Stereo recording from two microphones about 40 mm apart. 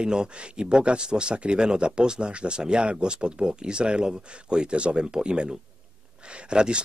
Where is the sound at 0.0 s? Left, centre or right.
Right.